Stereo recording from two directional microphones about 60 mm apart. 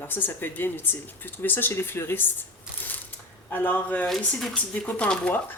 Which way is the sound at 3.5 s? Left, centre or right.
Left.